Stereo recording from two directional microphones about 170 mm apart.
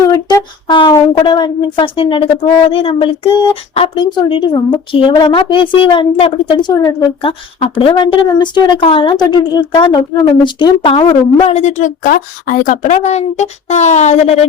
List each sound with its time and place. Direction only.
0.1 s a woman's voice: 25° left (ahead or behind)
11.5 s speech: 45° left (ahead or behind)